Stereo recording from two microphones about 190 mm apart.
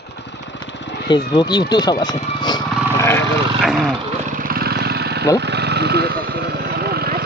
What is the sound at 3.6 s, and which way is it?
Speech, centre (ahead or behind).